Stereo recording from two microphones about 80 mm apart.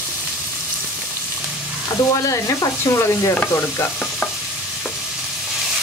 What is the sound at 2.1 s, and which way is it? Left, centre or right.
Speech, left.